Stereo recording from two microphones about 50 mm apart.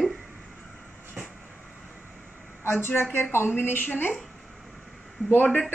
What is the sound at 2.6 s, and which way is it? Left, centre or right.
A woman's voice, left.